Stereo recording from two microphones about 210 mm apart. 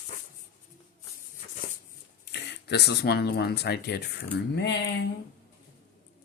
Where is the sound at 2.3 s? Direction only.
55° left (ahead or behind).